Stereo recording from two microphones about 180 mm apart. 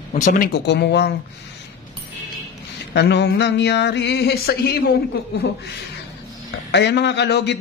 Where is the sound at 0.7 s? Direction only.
70° left (ahead or behind).